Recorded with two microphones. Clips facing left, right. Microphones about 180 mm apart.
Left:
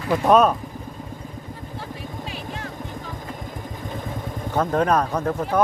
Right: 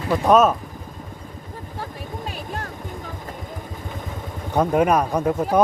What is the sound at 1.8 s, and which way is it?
Vehicle, 45° right (ahead or behind).